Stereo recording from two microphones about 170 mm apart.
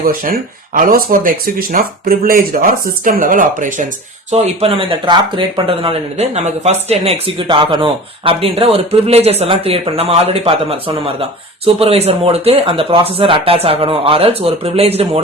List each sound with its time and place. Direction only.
0.0 s speech: 55° right (ahead or behind)
4.3 s speech: 40° right (ahead or behind)